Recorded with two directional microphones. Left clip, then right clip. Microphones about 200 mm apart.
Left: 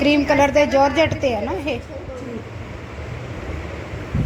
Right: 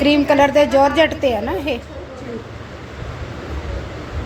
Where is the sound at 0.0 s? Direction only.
10° right (ahead or behind).